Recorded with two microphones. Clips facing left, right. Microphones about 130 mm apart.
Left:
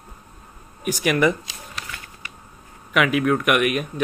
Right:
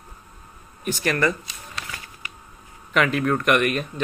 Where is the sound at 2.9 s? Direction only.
5° left (ahead or behind).